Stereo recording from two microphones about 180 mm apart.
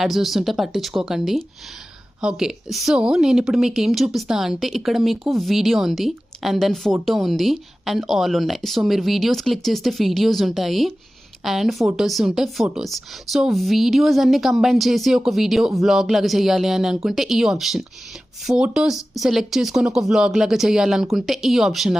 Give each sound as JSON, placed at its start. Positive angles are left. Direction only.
{"t": 0.0, "sound": "a woman's voice", "side_deg": 0}